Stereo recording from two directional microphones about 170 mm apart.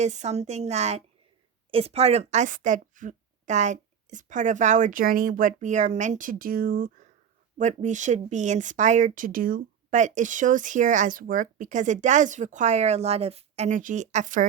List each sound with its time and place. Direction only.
0.0 s a woman's voice: 40° right (ahead or behind)
7.6 s speech: 45° right (ahead or behind)